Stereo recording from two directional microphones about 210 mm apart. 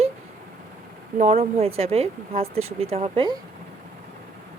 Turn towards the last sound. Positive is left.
turn(degrees=-30)  # may be behind; listen again after turning